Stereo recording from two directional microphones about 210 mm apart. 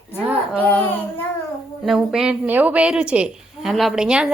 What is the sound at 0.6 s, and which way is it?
Speech, 10° left (ahead or behind).